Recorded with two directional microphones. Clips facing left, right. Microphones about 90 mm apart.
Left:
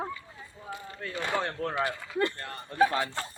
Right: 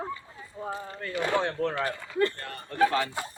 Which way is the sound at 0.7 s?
35° right (ahead or behind).